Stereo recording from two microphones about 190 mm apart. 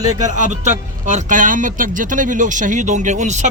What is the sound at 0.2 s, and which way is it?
A man's voice, 40° right (ahead or behind).